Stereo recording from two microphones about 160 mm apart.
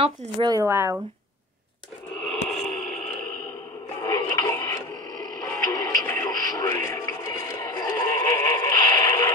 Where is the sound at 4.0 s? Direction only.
25° left (ahead or behind).